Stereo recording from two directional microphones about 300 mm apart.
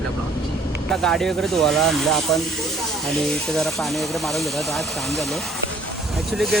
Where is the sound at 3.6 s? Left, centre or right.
Centre.